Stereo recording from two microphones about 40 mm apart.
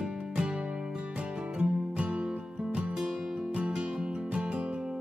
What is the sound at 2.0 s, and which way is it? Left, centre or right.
Music, right.